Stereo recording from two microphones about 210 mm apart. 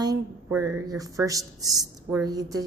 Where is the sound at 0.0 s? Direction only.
15° right (ahead or behind).